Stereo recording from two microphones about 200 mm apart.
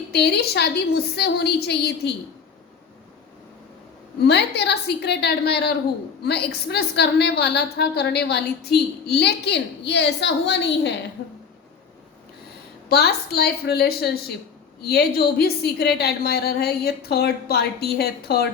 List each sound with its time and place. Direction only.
0.1 s a woman's voice: 55° left (ahead or behind)
4.3 s a woman's voice: 55° left (ahead or behind)
12.9 s a woman's voice: 55° left (ahead or behind)